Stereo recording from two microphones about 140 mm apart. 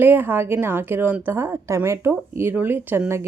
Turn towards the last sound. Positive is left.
turn(degrees=-15)  # may be behind; listen again after turning